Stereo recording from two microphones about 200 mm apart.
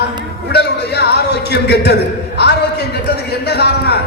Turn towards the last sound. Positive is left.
turn(degrees=55)  # may be behind; listen again after turning